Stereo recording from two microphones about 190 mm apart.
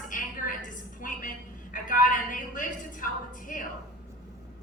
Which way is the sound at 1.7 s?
45° left (ahead or behind).